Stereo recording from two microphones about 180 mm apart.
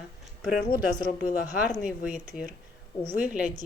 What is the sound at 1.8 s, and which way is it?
A woman's voice, 5° right (ahead or behind).